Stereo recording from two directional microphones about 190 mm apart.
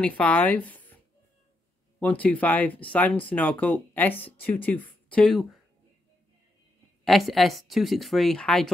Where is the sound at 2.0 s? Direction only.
10° left (ahead or behind).